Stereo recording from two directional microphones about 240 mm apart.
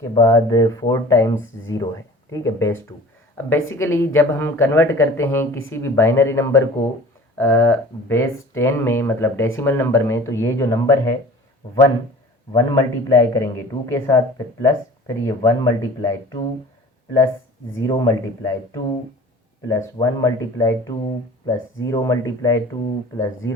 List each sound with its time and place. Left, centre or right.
0.0 s speech: centre
11.6 s speech: left
12.5 s speech: centre
17.7 s speech: centre